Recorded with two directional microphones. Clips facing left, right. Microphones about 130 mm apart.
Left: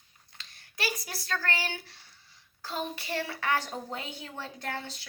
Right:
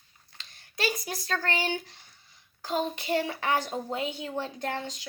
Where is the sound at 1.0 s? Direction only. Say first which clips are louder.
Right 3 dB; 20° right (ahead or behind).